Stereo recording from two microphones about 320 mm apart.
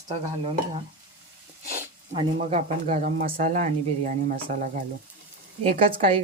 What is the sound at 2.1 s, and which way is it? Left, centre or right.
Speech, centre.